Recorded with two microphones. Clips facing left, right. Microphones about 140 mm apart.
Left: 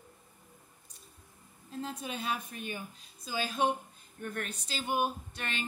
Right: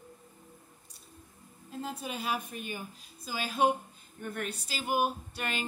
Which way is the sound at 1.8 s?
5° right (ahead or behind).